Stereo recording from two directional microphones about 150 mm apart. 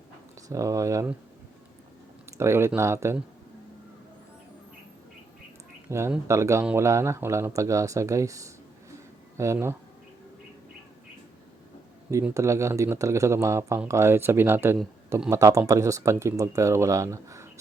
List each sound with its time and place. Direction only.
0.4 s speech: 20° right (ahead or behind)
2.4 s speech: 20° right (ahead or behind)
5.9 s speech: 20° right (ahead or behind)
12.3 s speech: 20° right (ahead or behind)